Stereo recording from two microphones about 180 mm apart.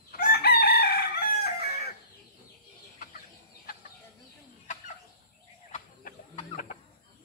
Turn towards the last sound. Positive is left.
turn(degrees=50)  # may be behind; listen again after turning